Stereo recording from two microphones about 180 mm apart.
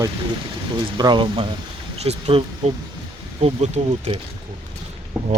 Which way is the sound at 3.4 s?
35° right (ahead or behind).